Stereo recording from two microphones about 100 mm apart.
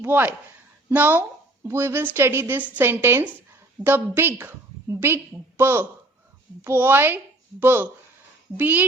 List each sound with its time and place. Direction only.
0.0 s a woman's voice: 20° right (ahead or behind)